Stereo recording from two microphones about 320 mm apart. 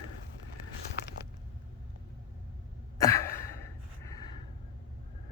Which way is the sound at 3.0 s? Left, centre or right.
Centre.